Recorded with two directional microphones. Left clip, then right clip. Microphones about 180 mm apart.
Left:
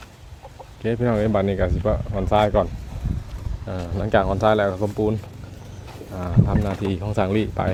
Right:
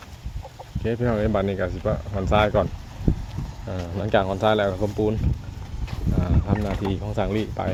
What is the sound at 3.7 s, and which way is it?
Speech, 15° left (ahead or behind).